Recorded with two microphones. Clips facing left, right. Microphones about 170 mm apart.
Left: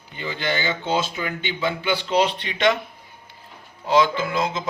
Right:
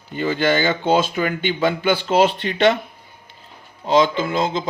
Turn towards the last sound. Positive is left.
turn(degrees=-25)  # may be behind; listen again after turning